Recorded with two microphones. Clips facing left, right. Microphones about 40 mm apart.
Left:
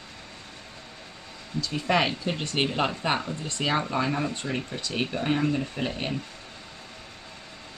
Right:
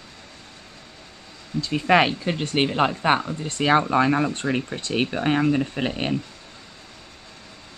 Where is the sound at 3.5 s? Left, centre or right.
Right.